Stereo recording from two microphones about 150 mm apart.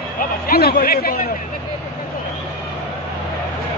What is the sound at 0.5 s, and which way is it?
Speech, 85° left.